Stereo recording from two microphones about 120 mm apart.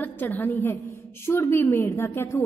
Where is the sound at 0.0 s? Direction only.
15° left (ahead or behind).